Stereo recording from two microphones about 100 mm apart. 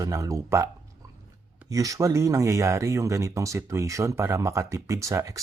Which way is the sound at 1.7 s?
35° right (ahead or behind).